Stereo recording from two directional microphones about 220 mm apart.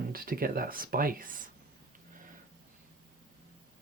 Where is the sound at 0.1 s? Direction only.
40° right (ahead or behind).